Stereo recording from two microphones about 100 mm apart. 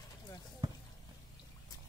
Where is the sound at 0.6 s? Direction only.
40° right (ahead or behind).